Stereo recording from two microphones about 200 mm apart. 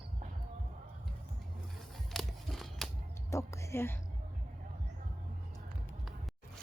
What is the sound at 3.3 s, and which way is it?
Whispering, 15° left (ahead or behind).